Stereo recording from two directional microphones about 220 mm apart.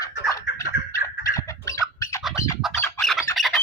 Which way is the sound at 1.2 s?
15° left (ahead or behind).